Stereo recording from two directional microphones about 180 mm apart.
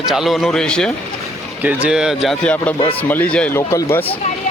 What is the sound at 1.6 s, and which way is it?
A man's voice, 10° right (ahead or behind).